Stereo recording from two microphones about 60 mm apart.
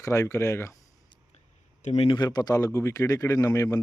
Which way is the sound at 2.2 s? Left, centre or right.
Left.